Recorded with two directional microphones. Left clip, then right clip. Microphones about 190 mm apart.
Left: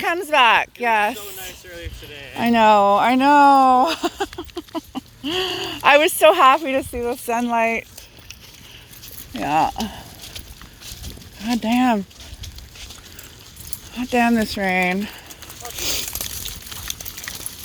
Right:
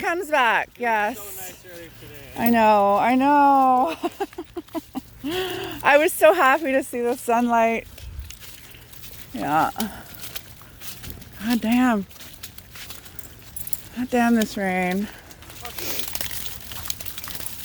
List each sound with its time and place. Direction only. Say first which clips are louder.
0.0 s speech: left 4 dB; 5° right (ahead or behind)
2.3 s speech: left 3 dB; 5° left (ahead or behind)
7.0 s speech: right 1 dB; 20° right (ahead or behind)
9.3 s speech: left 2 dB; centre (ahead or behind)
9.8 s a sound: left 2 dB; centre (ahead or behind)
11.3 s speech: left 2 dB; centre (ahead or behind)
13.9 s speech: left 3 dB; 5° right (ahead or behind)
15.8 s a sound: left 6 dB; 5° left (ahead or behind)